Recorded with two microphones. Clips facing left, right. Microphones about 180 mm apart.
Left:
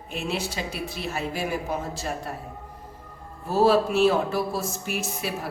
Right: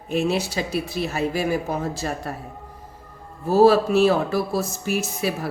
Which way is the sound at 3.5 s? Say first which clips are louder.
Right 5 dB; 40° right (ahead or behind).